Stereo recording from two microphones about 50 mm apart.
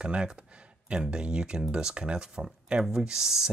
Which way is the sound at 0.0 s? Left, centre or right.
Centre.